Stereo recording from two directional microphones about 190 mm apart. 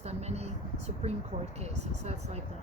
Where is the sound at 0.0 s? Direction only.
35° right (ahead or behind).